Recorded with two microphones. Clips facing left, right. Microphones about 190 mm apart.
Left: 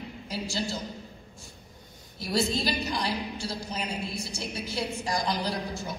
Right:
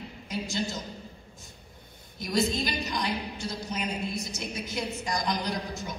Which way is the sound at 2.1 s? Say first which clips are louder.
Even; 30° left (ahead or behind).